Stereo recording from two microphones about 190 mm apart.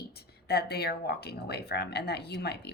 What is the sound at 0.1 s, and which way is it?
A woman's voice, 55° left (ahead or behind).